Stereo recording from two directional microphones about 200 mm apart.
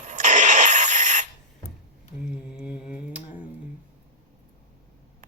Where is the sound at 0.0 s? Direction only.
40° right (ahead or behind).